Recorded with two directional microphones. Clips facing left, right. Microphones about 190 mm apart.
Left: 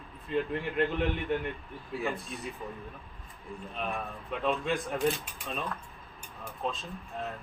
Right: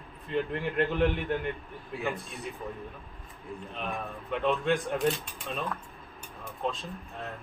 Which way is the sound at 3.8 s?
Centre (ahead or behind).